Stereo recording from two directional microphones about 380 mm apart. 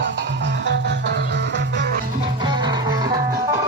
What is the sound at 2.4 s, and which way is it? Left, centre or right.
Music, centre.